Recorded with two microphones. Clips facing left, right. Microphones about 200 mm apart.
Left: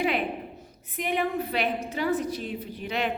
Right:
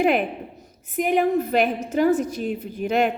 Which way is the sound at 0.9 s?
45° right (ahead or behind).